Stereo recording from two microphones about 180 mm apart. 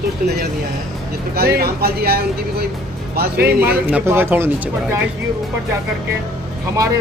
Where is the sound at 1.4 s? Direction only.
60° right (ahead or behind).